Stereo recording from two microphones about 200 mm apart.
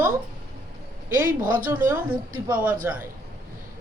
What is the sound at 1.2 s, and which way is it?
Speech, 45° right (ahead or behind).